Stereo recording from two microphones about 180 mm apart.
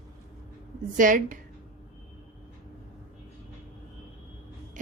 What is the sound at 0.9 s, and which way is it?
Speech, 45° right (ahead or behind).